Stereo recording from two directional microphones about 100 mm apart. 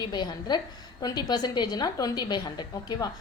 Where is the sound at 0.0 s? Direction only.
45° left (ahead or behind).